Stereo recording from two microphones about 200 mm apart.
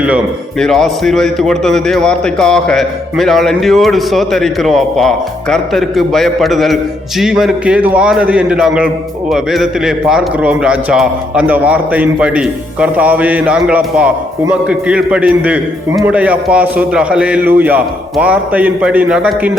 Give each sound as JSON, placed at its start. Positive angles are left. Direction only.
{"t": 0.6, "sound": "a man's voice", "side_deg": 0}